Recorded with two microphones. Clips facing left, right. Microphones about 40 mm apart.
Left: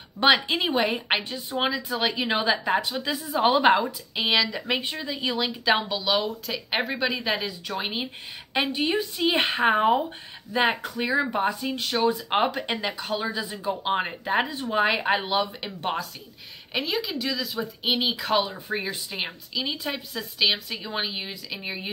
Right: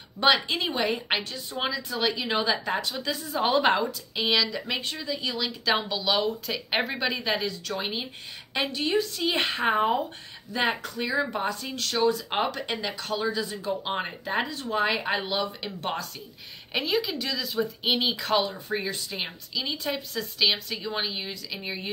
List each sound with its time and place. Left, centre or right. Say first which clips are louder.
0.5 s speech: left 3 dB; centre
5.7 s speech: left 2 dB; centre
7.6 s speech: left 1 dB; centre
14.4 s speech: left 1 dB; left